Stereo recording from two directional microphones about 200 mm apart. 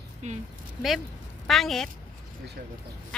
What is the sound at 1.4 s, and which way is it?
Speech, centre (ahead or behind).